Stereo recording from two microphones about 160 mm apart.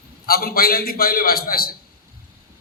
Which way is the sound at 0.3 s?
70° left (ahead or behind).